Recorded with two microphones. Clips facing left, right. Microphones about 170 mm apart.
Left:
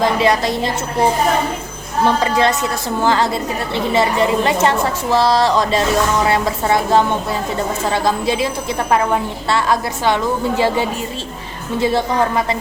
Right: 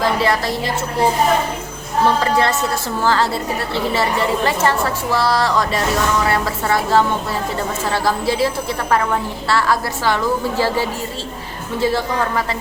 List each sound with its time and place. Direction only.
0.0 s a woman's voice: 20° left (ahead or behind)
2.2 s a woman's voice: 20° left (ahead or behind)